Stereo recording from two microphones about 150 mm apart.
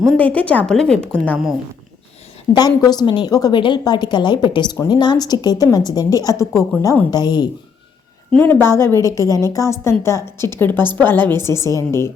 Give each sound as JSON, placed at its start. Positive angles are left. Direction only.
{"t": 0.0, "sound": "a woman's voice", "side_deg": 5}
{"t": 2.5, "sound": "a woman's voice", "side_deg": 25}
{"t": 8.3, "sound": "a woman's voice", "side_deg": 10}